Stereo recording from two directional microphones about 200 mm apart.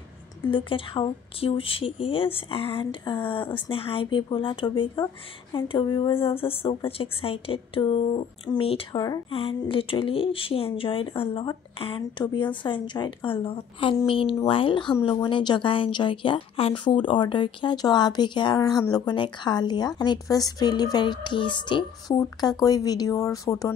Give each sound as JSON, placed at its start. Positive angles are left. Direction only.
{"t": 0.5, "sound": "a woman's voice", "side_deg": 25}